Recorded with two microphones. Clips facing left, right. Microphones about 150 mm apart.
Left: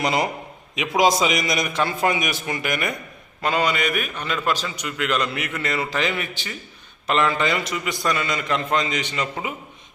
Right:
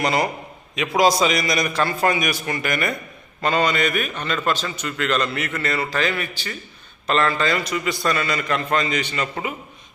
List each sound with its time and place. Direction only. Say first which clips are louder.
0.0 s a man's voice: right 1 dB; 20° left (ahead or behind)